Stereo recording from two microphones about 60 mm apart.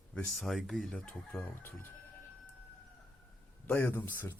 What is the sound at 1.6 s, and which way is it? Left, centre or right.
Speech, left.